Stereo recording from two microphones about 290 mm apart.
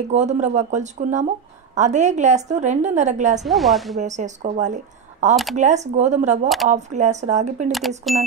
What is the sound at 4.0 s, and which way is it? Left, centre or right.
Speech, right.